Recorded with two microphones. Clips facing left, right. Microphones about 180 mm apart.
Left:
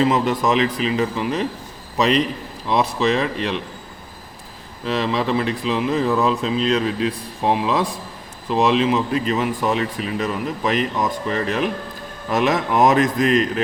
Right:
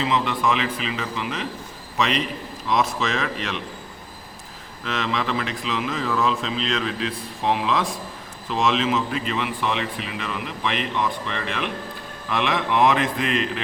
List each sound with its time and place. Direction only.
0.0 s speech: 45° left (ahead or behind)
4.9 s speech: 35° left (ahead or behind)